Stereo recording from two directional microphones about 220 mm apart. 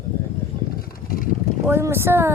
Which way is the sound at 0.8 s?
40° left (ahead or behind).